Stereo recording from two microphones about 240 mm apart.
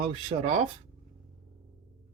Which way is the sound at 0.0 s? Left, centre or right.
Right.